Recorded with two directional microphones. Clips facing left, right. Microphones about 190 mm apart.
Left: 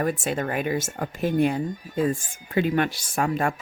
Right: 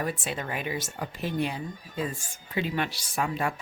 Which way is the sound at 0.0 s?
50° left (ahead or behind).